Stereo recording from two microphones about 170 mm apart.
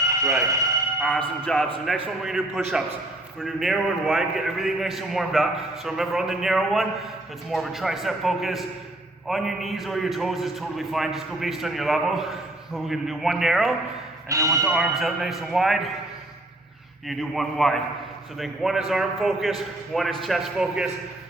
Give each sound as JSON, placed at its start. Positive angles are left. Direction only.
{"t": 0.1, "sound": "speech", "side_deg": -20}
{"t": 1.0, "sound": "a man's voice", "side_deg": 5}
{"t": 3.4, "sound": "a man's voice", "side_deg": 0}
{"t": 14.3, "sound": "speech", "side_deg": -20}
{"t": 14.6, "sound": "a man's voice", "side_deg": 0}
{"t": 17.1, "sound": "a man's voice", "side_deg": 0}